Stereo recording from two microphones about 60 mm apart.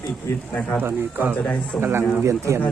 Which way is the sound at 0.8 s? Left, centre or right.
Right.